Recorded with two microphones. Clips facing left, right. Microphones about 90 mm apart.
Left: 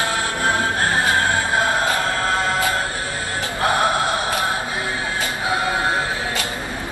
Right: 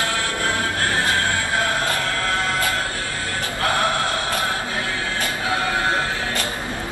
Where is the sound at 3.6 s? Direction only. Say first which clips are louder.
Left 3 dB; 20° left (ahead or behind).